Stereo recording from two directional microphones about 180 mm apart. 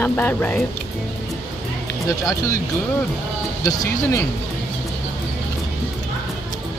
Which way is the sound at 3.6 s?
15° left (ahead or behind).